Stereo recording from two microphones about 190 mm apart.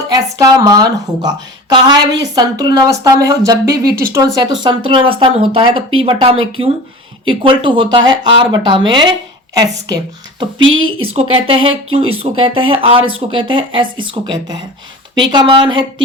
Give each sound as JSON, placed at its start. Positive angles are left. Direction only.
{"t": 0.1, "sound": "a woman's voice", "side_deg": -20}
{"t": 10.6, "sound": "a woman's voice", "side_deg": -90}
{"t": 11.0, "sound": "a woman's voice", "side_deg": -30}